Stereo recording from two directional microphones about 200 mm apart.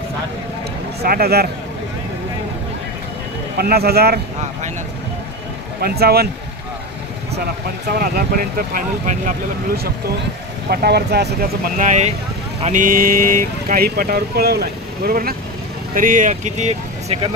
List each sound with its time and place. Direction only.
1.0 s speech: 50° right (ahead or behind)
3.5 s speech: 50° right (ahead or behind)
5.8 s speech: 50° right (ahead or behind)
7.9 s speech: 45° right (ahead or behind)
10.7 s speech: 55° right (ahead or behind)
11.8 s speech: 35° right (ahead or behind)